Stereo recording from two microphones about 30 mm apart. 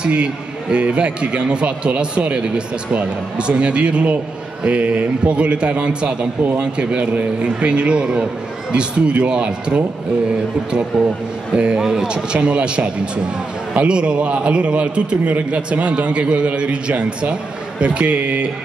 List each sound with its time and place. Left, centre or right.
0.0 s a man's voice: right
10.9 s a man's voice: right
11.5 s a man's voice: right
11.8 s speech: centre
12.1 s a man's voice: right